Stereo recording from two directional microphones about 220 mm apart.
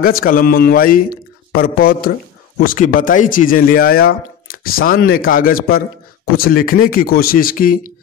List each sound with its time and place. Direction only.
0.0 s speech: 40° left (ahead or behind)